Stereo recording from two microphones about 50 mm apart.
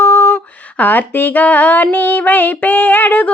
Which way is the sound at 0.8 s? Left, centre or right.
Left.